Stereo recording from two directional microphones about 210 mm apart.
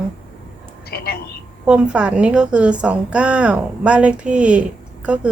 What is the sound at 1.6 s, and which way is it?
Speech, 5° right (ahead or behind).